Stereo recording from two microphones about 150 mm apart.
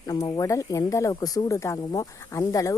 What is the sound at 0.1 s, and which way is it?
Speech, 25° left (ahead or behind).